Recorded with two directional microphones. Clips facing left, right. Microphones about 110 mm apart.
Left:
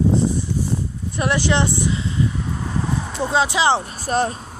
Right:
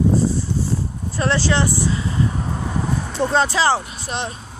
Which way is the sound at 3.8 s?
45° left (ahead or behind).